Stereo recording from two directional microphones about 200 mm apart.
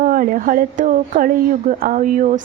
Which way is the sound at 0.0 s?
45° right (ahead or behind).